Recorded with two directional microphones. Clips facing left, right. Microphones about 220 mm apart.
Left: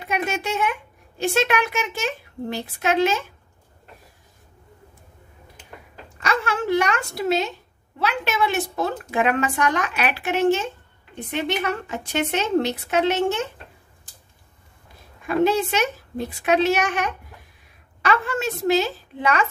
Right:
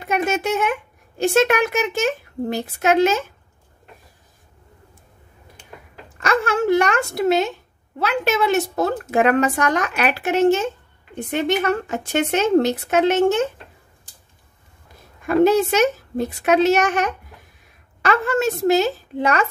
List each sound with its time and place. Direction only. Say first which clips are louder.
0.0 s a child's voice: right 5 dB; 50° right (ahead or behind)
6.1 s a sound: right 5 dB; 45° right (ahead or behind)
8.0 s speech: right 3 dB; 45° right (ahead or behind)
15.2 s speech: right 5 dB; 45° right (ahead or behind)